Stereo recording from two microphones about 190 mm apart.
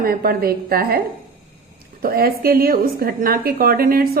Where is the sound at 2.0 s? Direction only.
50° right (ahead or behind).